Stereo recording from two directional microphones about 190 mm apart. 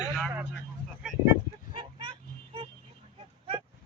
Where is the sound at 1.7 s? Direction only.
25° right (ahead or behind).